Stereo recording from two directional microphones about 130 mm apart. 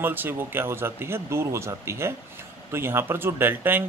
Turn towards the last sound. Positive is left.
turn(degrees=-15)  # may be behind; listen again after turning